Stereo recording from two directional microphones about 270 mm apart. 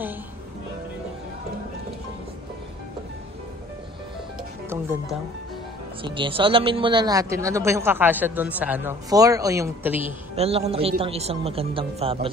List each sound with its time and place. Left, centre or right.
4.6 s speech: centre
6.0 s speech: centre
10.3 s speech: right